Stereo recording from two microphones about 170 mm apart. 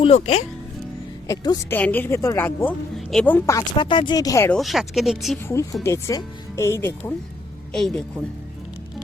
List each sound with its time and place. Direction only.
0.0 s speech: 40° left (ahead or behind)
1.3 s speech: 20° left (ahead or behind)
3.8 s speech: 30° left (ahead or behind)
4.5 s speech: centre (ahead or behind)
5.8 s speech: 20° left (ahead or behind)
7.7 s speech: 5° left (ahead or behind)